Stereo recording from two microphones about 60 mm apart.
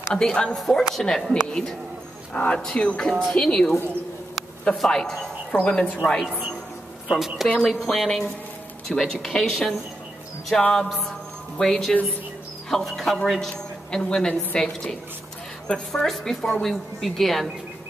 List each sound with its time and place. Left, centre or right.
0.1 s a man's voice: centre
4.7 s a man's voice: centre
7.1 s a woman's voice: centre
7.5 s a woman's voice: centre
11.1 s a sound: centre
12.6 s a man's voice: centre